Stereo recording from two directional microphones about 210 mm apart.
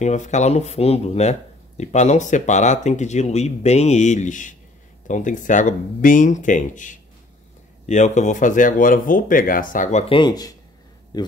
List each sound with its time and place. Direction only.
0.0 s speech: 35° left (ahead or behind)